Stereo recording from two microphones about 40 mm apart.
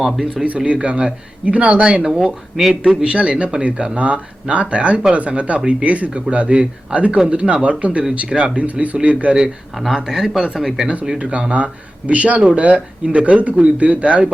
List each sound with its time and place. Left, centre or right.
0.0 s speech: centre
0.4 s speech: right; by 3.0 s centre
3.0 s speech: right
8.3 s speech: centre
8.5 s speech: right
9.0 s speech: right
9.9 s speech: centre
11.2 s speech: right